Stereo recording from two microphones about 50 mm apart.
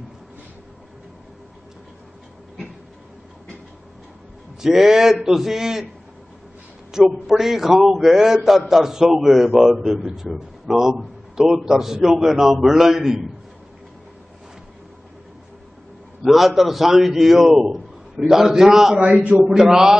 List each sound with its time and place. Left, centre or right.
4.6 s a man's voice: centre
6.9 s a man's voice: centre
16.3 s a man's voice: centre
19.1 s a man's voice: right
19.6 s a man's voice: centre